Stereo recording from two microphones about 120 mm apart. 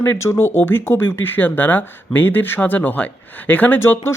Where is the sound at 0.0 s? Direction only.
20° left (ahead or behind).